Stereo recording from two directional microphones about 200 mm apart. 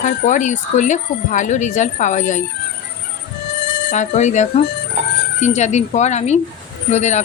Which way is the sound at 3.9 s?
35° left (ahead or behind).